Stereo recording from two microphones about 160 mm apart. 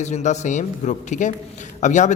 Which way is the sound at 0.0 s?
45° left (ahead or behind).